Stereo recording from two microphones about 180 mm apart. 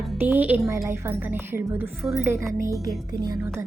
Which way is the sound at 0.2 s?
10° right (ahead or behind).